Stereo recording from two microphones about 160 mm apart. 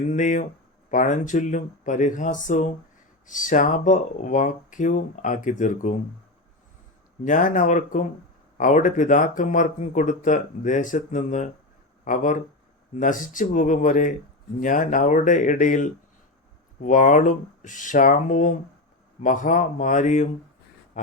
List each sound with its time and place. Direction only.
0.1 s speech: 50° left (ahead or behind)
7.3 s speech: 55° left (ahead or behind)